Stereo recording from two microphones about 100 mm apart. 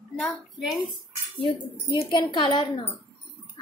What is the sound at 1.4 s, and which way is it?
A woman's voice, 50° left (ahead or behind).